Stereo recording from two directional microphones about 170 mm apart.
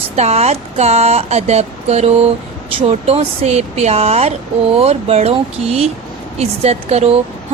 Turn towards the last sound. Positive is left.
turn(degrees=-40)  # may be behind; listen again after turning